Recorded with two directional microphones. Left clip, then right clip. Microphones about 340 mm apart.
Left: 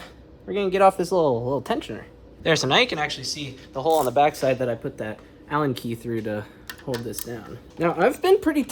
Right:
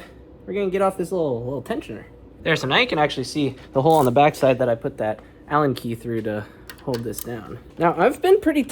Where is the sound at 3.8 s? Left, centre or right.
Centre.